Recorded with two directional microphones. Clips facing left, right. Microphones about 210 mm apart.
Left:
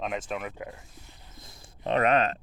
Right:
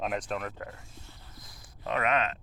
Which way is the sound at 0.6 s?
15° left (ahead or behind).